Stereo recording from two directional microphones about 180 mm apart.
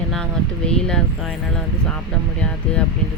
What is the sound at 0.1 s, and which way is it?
Speech, 5° left (ahead or behind).